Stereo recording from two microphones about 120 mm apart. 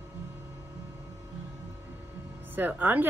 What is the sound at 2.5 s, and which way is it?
Speech, 15° right (ahead or behind).